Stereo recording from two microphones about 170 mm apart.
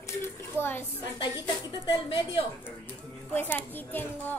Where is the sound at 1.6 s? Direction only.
25° left (ahead or behind).